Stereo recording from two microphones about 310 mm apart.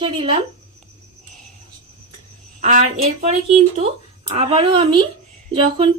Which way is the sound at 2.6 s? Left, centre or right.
Right.